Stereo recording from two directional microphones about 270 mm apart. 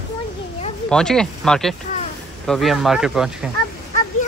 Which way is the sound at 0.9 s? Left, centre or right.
Centre.